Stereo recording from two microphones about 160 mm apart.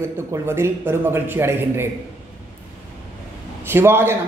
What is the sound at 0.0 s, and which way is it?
A man's voice, 15° right (ahead or behind).